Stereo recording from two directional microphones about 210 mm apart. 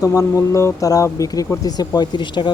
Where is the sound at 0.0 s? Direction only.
15° left (ahead or behind).